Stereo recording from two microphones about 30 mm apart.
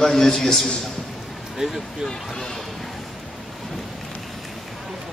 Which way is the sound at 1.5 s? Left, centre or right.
Centre.